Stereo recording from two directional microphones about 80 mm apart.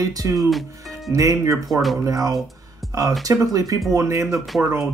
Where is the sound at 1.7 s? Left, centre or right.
Centre.